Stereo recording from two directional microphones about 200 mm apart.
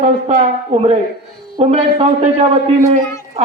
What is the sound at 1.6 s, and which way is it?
Speech, 30° right (ahead or behind).